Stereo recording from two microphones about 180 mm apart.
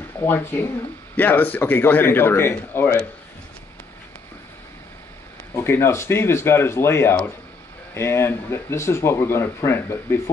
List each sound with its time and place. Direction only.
0.2 s speech: 15° left (ahead or behind)
5.6 s speech: 15° left (ahead or behind)